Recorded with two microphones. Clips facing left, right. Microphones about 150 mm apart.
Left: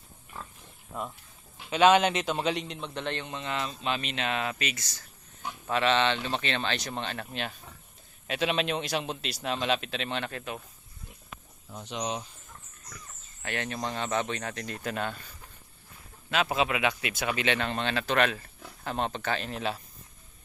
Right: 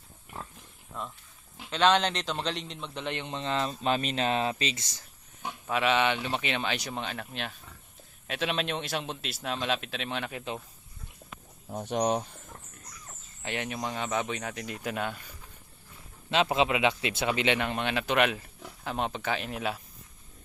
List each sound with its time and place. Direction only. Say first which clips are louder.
0.9 s a man's voice: left 3 dB; 10° left (ahead or behind)
3.2 s speech: right 3 dB; 30° right (ahead or behind)
5.6 s a man's voice: left 1 dB; 5° right (ahead or behind)
10.3 s speech: right 1 dB; 20° right (ahead or behind)
11.7 s speech: right 6 dB; 50° right (ahead or behind)
13.4 s speech: even; 15° right (ahead or behind)
16.3 s a man's voice: right 2 dB; 25° right (ahead or behind); by 19.8 s 10° right (ahead or behind)